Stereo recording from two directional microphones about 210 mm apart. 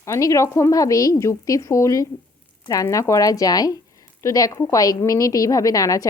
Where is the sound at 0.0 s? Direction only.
15° left (ahead or behind).